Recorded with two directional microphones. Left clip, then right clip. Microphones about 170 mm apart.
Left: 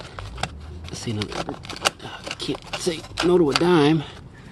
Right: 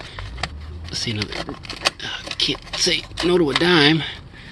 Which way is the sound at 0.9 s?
10° left (ahead or behind).